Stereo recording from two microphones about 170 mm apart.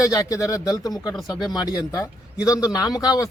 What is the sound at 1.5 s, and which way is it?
Speech, 20° left (ahead or behind).